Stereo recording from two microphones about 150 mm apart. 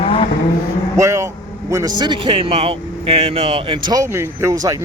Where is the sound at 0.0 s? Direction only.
40° left (ahead or behind).